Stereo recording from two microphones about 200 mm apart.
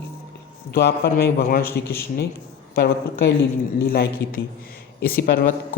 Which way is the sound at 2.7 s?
55° left (ahead or behind).